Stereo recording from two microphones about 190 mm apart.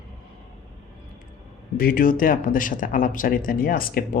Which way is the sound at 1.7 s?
50° left (ahead or behind).